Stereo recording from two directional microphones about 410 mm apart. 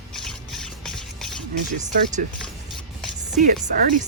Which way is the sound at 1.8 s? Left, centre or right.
Centre.